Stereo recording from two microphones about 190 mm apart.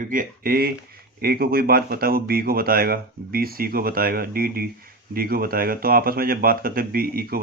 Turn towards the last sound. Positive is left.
turn(degrees=-50)  # may be behind; listen again after turning